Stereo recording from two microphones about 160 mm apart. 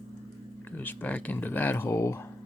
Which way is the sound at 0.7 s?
10° left (ahead or behind).